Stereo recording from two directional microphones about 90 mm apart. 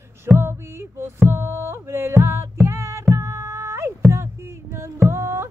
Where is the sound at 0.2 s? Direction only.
30° right (ahead or behind).